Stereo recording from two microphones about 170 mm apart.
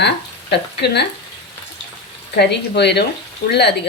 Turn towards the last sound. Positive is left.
turn(degrees=75)  # may be behind; listen again after turning